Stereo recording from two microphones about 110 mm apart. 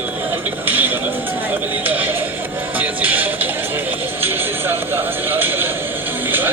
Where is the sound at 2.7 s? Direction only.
15° right (ahead or behind).